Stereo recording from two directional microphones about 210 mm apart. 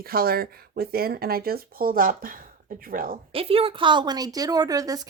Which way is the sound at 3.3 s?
25° right (ahead or behind).